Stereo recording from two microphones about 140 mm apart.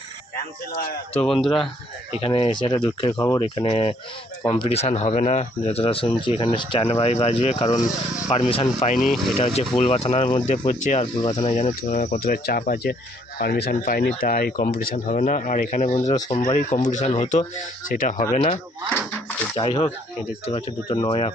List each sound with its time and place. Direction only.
1.2 s speech: centre (ahead or behind)
2.1 s speech: 45° left (ahead or behind)
8.8 s speech: 65° left (ahead or behind)
9.0 s speech: centre (ahead or behind)
9.4 s speech: 50° left (ahead or behind)
11.0 s speech: 35° left (ahead or behind)
11.8 s speech: 70° left (ahead or behind); by 17.4 s 55° left (ahead or behind)
17.8 s speech: 70° left (ahead or behind)
19.5 s speech: 45° left (ahead or behind)
20.8 s speech: 30° left (ahead or behind)